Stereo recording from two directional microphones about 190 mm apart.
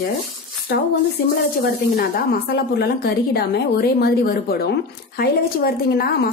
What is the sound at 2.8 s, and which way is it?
A woman's voice, 55° left (ahead or behind).